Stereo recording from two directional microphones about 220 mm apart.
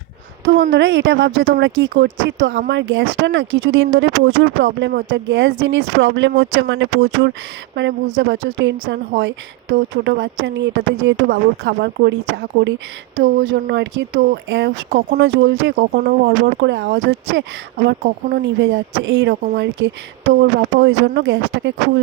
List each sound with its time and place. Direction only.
0.7 s a woman's voice: 55° right (ahead or behind)
13.1 s speech: 40° right (ahead or behind)
13.5 s a woman's voice: 55° right (ahead or behind)
17.8 s a woman's voice: 45° right (ahead or behind)